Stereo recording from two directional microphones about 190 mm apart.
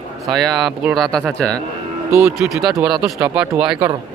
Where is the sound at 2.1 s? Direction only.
15° right (ahead or behind).